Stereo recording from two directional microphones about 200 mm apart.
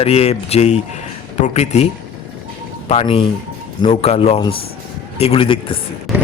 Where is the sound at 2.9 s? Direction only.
30° left (ahead or behind).